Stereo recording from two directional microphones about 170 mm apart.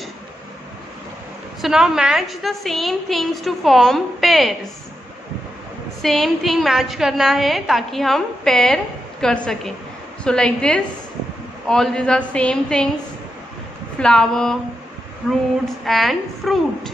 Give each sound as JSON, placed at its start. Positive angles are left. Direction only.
{"t": 1.6, "sound": "a woman's voice", "side_deg": -5}
{"t": 6.0, "sound": "a woman's voice", "side_deg": 0}
{"t": 13.9, "sound": "a woman's voice", "side_deg": 5}
{"t": 15.8, "sound": "a woman's voice", "side_deg": 0}